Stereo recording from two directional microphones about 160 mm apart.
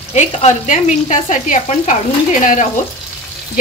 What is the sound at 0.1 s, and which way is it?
Speech, 50° left (ahead or behind).